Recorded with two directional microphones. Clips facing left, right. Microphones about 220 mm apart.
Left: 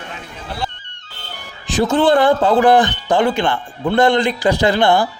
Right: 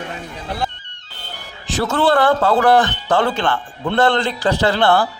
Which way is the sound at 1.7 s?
15° left (ahead or behind).